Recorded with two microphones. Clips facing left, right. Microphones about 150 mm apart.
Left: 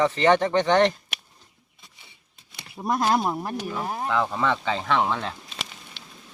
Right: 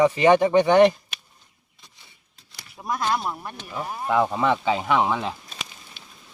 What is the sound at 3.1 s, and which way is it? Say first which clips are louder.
Speech: left 3 dB; 50° left (ahead or behind).